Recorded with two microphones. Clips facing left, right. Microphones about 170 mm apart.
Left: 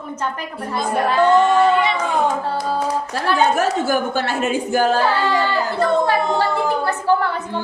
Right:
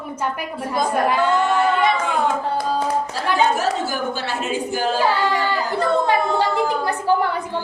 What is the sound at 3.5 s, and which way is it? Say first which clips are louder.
A woman's voice: left 4 dB; 55° left (ahead or behind).